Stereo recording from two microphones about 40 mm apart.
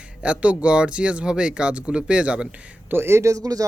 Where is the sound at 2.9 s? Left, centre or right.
Right.